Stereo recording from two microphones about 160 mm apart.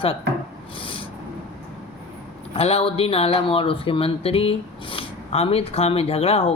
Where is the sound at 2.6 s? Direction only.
35° left (ahead or behind).